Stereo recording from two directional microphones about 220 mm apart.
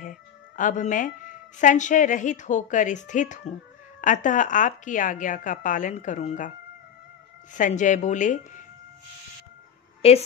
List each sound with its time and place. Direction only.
0.0 s a woman's voice: 35° left (ahead or behind)
7.5 s a woman's voice: 35° left (ahead or behind)
10.0 s a woman's voice: 30° left (ahead or behind)